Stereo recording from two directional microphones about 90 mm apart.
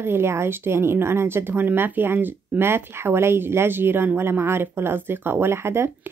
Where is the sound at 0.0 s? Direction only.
30° right (ahead or behind).